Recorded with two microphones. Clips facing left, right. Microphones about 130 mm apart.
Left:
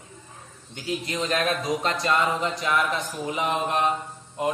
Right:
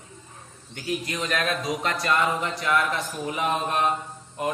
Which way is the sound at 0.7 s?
25° left (ahead or behind).